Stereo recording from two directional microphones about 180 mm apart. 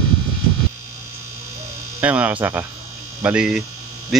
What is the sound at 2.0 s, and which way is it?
Speech, 10° right (ahead or behind).